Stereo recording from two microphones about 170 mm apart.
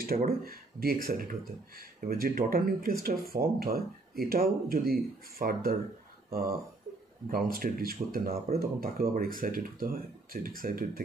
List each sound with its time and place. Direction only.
0.0 s speech: 60° right (ahead or behind)
7.2 s speech: 60° right (ahead or behind)